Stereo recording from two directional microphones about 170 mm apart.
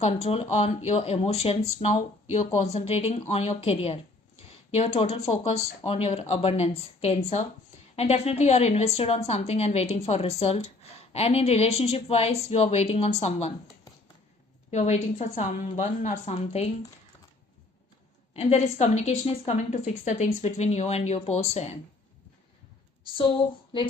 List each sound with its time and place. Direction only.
0.0 s a woman's voice: 40° left (ahead or behind)
4.9 s a woman's voice: 35° left (ahead or behind)
14.7 s a woman's voice: 40° left (ahead or behind)
18.3 s a woman's voice: 40° left (ahead or behind)